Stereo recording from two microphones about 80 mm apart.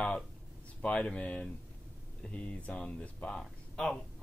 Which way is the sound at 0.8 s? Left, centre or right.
Centre.